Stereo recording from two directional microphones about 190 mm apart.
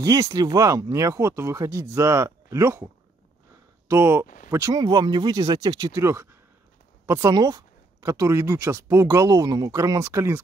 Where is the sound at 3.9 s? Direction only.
10° right (ahead or behind).